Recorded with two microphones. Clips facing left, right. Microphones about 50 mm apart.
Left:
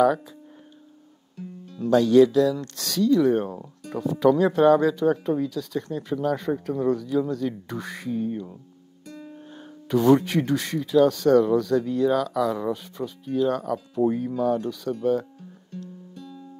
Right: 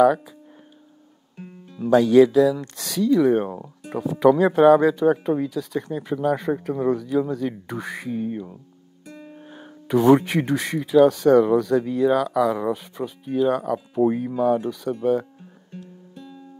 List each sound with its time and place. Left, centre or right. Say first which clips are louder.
1.8 s speech: right 2 dB; centre
15.7 s guitar: left 2 dB; centre